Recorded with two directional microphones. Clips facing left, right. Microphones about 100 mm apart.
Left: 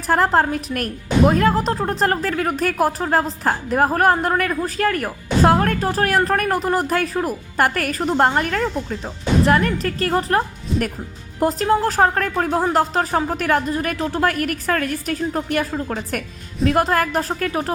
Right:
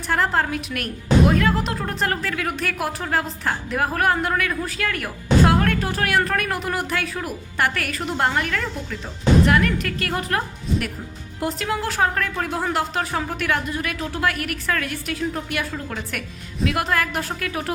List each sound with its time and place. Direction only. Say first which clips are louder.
0.1 s a woman's voice: left 5 dB; 40° left (ahead or behind)